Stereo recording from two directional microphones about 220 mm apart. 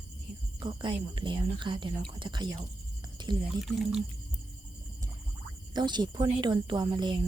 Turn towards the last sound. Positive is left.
turn(degrees=-20)  # may be behind; listen again after turning